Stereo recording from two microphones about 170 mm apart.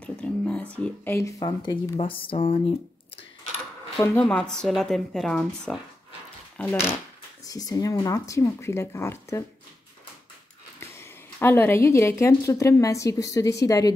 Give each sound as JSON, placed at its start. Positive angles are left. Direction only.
{"t": 0.0, "sound": "a sound", "side_deg": 5}
{"t": 2.0, "sound": "speech", "side_deg": 30}
{"t": 4.0, "sound": "speech", "side_deg": 10}
{"t": 10.8, "sound": "a woman's voice", "side_deg": 15}